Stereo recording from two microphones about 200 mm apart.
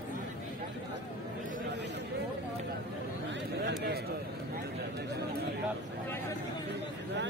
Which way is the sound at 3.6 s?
55° right (ahead or behind).